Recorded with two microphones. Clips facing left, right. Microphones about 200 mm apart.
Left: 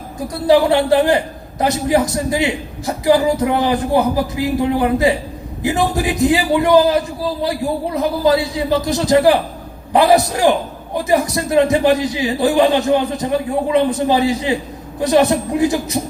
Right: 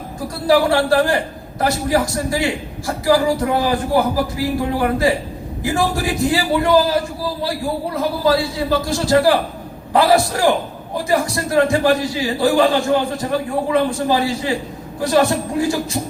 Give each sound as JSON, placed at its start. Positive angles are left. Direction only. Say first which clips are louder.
{"t": 0.2, "sound": "a man's voice", "louder": "left 2 dB", "side_deg": 20}